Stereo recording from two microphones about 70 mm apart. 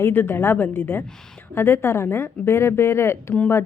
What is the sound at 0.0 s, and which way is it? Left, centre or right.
A woman's voice, left.